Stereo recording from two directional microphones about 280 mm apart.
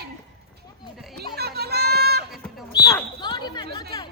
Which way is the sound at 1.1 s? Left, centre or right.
Right.